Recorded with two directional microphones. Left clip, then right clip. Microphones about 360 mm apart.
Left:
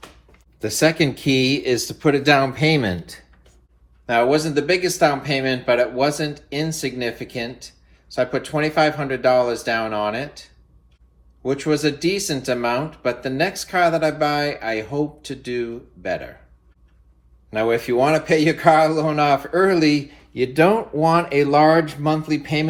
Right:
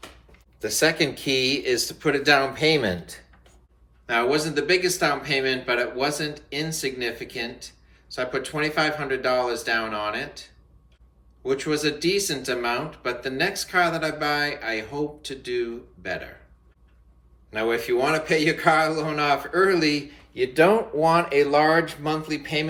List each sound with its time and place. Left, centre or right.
0.6 s speech: centre
17.5 s speech: centre